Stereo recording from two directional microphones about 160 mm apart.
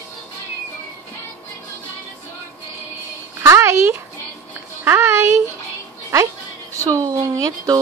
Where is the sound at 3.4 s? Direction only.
15° right (ahead or behind).